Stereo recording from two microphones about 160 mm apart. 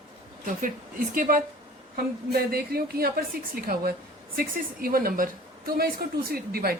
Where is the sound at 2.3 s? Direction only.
70° right (ahead or behind).